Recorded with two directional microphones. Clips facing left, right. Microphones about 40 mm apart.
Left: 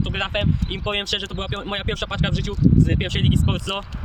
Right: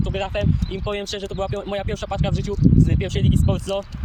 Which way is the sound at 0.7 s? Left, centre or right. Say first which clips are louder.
Left 2 dB; left.